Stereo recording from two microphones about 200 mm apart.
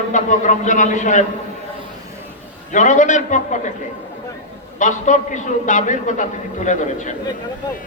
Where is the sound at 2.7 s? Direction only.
40° left (ahead or behind).